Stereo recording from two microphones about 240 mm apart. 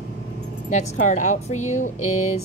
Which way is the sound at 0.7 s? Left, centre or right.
Left.